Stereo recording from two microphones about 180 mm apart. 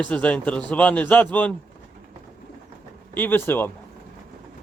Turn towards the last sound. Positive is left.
turn(degrees=10)  # may be behind; listen again after turning